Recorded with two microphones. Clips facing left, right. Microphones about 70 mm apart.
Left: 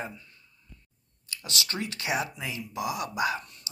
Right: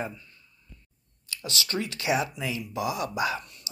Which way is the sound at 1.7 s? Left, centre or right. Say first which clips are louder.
Right 5 dB; left.